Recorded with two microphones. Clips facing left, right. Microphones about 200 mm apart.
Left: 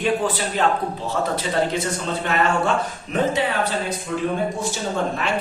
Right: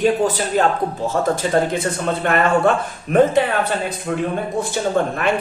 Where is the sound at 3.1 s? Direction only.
55° right (ahead or behind).